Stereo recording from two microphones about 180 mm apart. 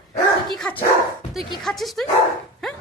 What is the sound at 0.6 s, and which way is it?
A woman's voice, 10° left (ahead or behind).